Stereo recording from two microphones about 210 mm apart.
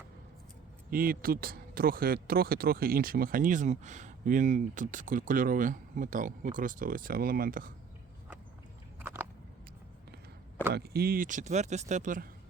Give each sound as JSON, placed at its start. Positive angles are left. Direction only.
{"t": 0.9, "sound": "speech", "side_deg": -45}
{"t": 10.7, "sound": "speech", "side_deg": -50}